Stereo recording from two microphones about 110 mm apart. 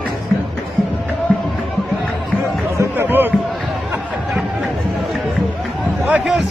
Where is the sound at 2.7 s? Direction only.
25° right (ahead or behind).